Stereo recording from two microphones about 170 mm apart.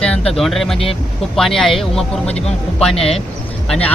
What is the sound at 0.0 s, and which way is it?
Speech, 5° left (ahead or behind).